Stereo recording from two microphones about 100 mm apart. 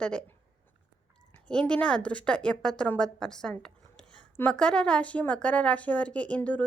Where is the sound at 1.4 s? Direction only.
10° left (ahead or behind).